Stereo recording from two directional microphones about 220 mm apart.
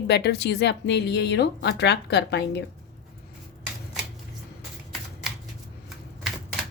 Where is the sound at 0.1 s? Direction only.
50° left (ahead or behind).